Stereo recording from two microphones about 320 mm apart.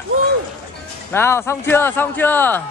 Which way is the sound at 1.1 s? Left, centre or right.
Centre.